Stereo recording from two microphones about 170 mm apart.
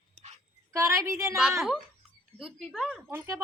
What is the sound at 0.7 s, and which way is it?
Speech, 20° right (ahead or behind).